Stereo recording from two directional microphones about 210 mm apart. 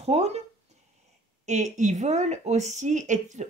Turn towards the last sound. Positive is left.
turn(degrees=-35)  # may be behind; listen again after turning